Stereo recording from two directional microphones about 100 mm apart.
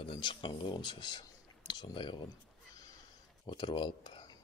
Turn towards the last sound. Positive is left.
turn(degrees=50)  # may be behind; listen again after turning